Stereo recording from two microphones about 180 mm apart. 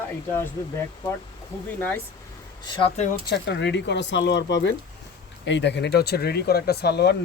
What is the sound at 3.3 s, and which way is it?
Speech, 75° left (ahead or behind).